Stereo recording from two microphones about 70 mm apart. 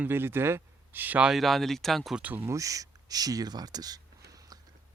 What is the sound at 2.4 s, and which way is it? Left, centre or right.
Speech, right.